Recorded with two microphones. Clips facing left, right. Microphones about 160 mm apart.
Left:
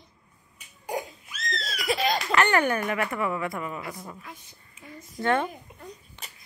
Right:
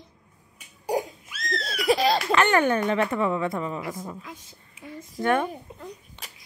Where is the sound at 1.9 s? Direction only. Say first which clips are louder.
Right 6 dB; 35° right (ahead or behind).